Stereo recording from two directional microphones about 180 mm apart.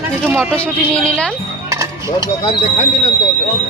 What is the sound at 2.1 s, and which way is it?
Speech, 25° left (ahead or behind).